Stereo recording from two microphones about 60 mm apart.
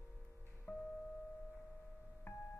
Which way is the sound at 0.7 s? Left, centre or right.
Left.